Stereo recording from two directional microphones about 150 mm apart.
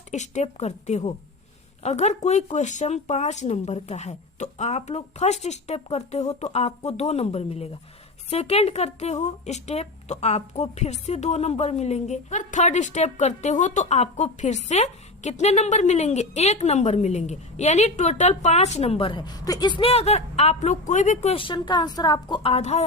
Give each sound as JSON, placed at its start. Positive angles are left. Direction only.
{"t": 0.1, "sound": "speech", "side_deg": 50}